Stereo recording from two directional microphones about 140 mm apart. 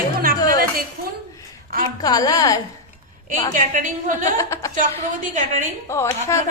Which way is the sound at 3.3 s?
70° right (ahead or behind).